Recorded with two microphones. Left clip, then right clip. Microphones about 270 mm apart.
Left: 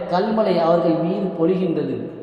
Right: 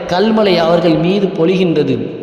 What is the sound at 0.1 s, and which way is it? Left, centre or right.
Speech, right.